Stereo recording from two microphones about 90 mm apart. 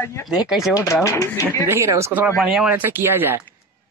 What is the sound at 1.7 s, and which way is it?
Speech, 30° right (ahead or behind).